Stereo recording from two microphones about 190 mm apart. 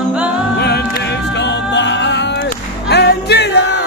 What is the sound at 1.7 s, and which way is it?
Music, 70° left (ahead or behind).